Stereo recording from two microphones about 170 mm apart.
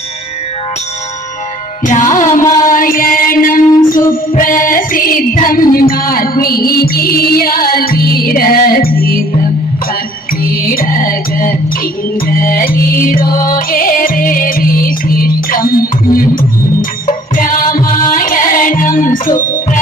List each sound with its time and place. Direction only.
1.8 s music: 50° left (ahead or behind)
10.4 s music: 55° left (ahead or behind)